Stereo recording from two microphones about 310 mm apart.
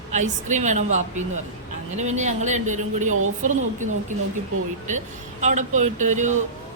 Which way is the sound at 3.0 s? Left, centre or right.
Right.